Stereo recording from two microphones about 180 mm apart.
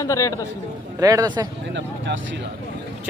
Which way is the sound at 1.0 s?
20° right (ahead or behind).